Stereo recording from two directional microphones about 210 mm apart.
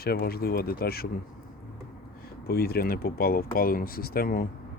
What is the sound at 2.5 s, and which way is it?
Speech, 45° left (ahead or behind).